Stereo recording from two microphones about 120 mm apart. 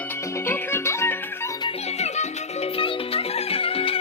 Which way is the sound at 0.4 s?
20° left (ahead or behind).